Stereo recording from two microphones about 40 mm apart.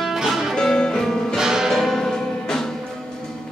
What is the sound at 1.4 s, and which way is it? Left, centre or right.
Music, centre.